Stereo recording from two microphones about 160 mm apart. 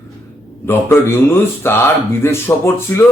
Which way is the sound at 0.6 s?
15° left (ahead or behind).